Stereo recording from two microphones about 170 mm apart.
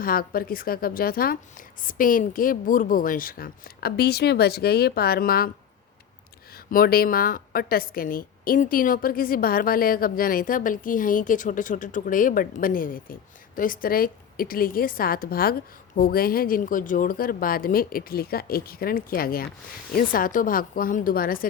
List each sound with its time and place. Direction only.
0.0 s a woman's voice: 60° left (ahead or behind)
6.7 s a woman's voice: 60° left (ahead or behind)